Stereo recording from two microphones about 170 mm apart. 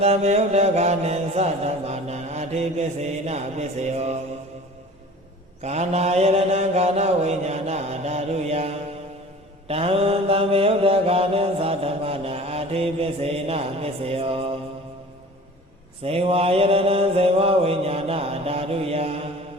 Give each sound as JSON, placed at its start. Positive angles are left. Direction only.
{"t": 0.0, "sound": "mantra", "side_deg": -40}
{"t": 5.6, "sound": "mantra", "side_deg": -40}
{"t": 16.0, "sound": "mantra", "side_deg": -35}